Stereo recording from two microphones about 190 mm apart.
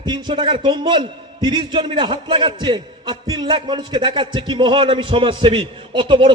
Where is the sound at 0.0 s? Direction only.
25° right (ahead or behind).